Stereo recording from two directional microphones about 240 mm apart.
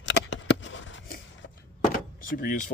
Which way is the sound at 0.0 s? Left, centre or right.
Left.